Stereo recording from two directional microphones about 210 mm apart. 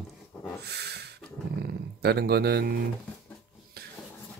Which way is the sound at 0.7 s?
50° right (ahead or behind).